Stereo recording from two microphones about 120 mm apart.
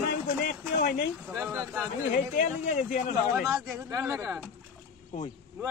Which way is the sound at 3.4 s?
Centre (ahead or behind).